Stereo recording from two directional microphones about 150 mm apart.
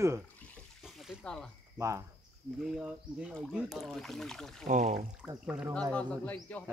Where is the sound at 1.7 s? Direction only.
20° right (ahead or behind).